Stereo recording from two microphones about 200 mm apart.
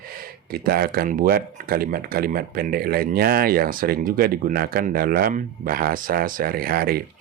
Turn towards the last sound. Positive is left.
turn(degrees=-50)  # may be behind; listen again after turning